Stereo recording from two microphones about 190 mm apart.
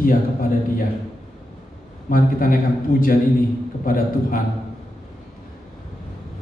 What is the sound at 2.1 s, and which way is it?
A man's voice, 45° left (ahead or behind).